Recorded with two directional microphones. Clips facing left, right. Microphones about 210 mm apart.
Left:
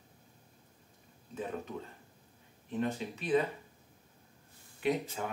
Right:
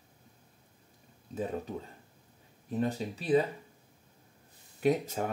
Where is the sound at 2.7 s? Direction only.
35° right (ahead or behind).